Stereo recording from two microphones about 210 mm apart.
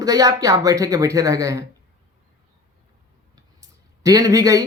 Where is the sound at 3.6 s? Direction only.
15° right (ahead or behind).